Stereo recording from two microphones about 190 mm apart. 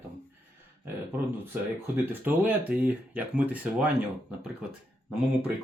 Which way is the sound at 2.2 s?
10° right (ahead or behind).